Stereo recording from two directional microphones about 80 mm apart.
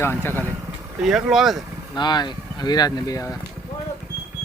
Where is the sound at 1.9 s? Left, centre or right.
Left.